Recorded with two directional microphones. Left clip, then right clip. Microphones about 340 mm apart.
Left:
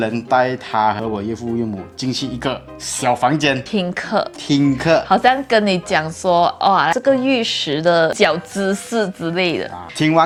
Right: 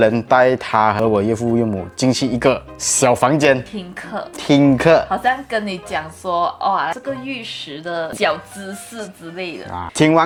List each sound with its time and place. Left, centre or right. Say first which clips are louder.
0.0 s speech: right 4 dB; right
3.0 s speech: right 2 dB; right
3.7 s a woman's voice: left 9 dB; left
4.4 s speech: right 7 dB; right
5.0 s a woman's voice: left 5 dB; left
10.0 s speech: right 1 dB; right